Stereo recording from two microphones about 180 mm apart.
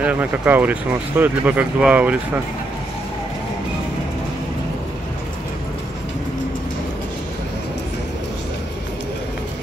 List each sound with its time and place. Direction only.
0.0 s speech: 10° right (ahead or behind)